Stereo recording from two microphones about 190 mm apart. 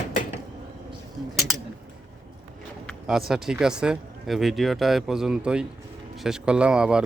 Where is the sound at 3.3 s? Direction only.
5° right (ahead or behind).